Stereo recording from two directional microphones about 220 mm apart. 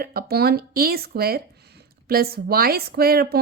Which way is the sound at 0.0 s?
45° right (ahead or behind).